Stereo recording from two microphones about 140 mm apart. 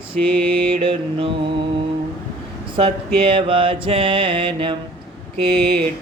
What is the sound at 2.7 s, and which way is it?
Mantra, 40° right (ahead or behind).